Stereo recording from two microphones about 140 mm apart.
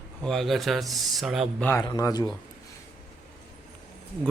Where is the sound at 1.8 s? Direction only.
25° left (ahead or behind).